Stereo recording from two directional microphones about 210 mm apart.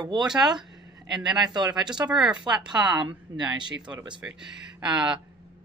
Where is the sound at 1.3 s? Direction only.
20° right (ahead or behind).